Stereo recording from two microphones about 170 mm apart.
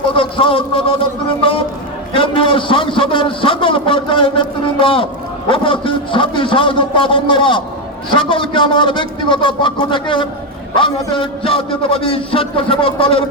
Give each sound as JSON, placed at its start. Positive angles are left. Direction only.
{"t": 0.1, "sound": "a man's voice", "side_deg": 30}